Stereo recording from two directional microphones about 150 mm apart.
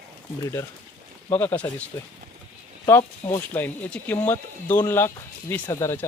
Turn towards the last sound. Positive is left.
turn(degrees=15)  # may be behind; listen again after turning